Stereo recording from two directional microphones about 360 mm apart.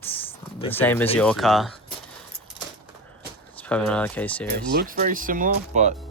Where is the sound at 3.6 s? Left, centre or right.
Centre.